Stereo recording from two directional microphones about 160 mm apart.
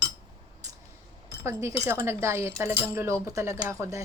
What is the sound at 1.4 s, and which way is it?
Speech, 15° right (ahead or behind).